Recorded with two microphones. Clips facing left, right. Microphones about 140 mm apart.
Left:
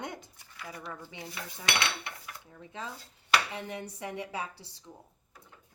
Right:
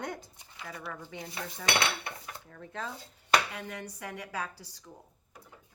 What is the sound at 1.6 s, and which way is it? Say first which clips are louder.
Cutlery: right 2 dB; 45° right (ahead or behind).